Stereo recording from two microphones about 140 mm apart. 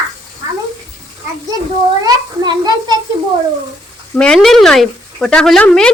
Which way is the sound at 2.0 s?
30° right (ahead or behind).